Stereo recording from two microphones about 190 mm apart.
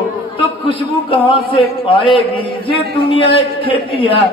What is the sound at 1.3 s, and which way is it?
A man's voice, 25° left (ahead or behind).